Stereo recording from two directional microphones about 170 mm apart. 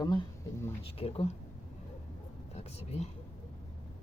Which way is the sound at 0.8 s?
35° left (ahead or behind).